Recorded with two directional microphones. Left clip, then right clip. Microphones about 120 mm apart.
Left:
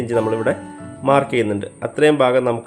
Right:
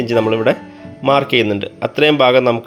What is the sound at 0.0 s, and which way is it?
A man's voice, 15° right (ahead or behind).